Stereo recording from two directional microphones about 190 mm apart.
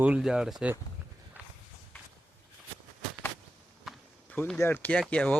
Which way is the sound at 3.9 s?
Centre (ahead or behind).